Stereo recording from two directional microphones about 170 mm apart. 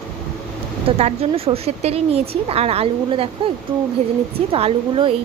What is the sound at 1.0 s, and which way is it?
A woman's voice, 35° right (ahead or behind).